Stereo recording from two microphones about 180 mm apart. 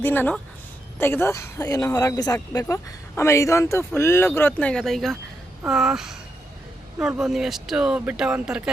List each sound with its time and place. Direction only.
0.0 s speech: 10° left (ahead or behind); by 8.7 s 5° right (ahead or behind)